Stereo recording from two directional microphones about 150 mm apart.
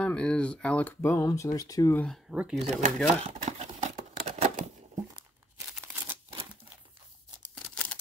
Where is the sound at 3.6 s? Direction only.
65° right (ahead or behind).